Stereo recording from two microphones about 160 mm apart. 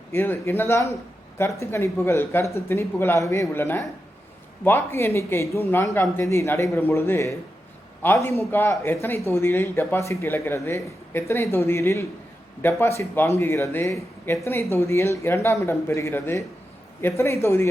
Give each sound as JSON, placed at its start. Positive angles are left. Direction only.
{"t": 0.1, "sound": "speech", "side_deg": 15}